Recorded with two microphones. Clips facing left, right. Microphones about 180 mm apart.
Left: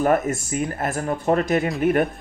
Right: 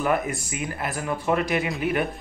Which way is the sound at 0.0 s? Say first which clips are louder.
Left 5 dB; 45° left (ahead or behind).